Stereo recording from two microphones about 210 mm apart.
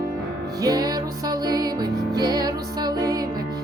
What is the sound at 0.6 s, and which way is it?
Music, 20° right (ahead or behind).